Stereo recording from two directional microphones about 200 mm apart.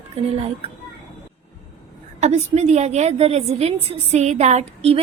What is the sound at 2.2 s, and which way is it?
A woman's voice, 35° right (ahead or behind).